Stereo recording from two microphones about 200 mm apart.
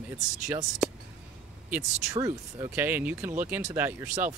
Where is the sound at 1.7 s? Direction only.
15° right (ahead or behind).